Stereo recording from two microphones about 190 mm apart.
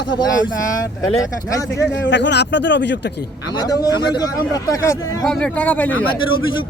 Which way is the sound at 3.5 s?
20° left (ahead or behind).